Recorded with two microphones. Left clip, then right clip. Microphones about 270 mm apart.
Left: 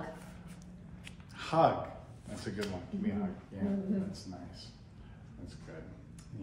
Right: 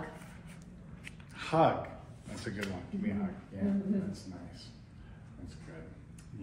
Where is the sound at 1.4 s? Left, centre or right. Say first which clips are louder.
Even; centre.